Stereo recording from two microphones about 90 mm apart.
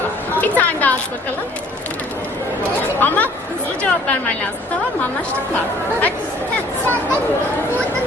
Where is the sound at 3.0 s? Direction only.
20° left (ahead or behind).